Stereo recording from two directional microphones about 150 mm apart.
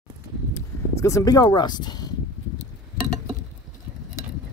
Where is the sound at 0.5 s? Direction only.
20° left (ahead or behind).